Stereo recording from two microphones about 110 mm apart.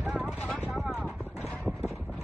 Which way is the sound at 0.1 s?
Centre (ahead or behind).